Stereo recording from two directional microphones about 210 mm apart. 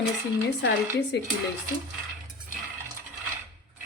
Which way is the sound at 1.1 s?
55° left (ahead or behind).